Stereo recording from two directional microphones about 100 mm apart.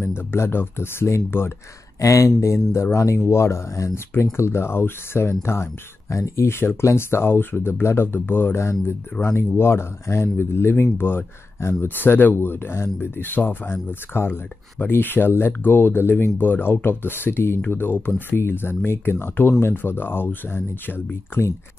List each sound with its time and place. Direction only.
0.1 s speech: 25° left (ahead or behind)